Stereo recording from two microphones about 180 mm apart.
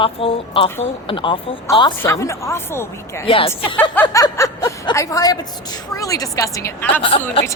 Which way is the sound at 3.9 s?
15° left (ahead or behind).